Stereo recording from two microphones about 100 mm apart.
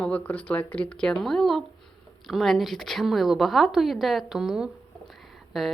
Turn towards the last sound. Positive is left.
turn(degrees=0)  # may be behind; listen again after turning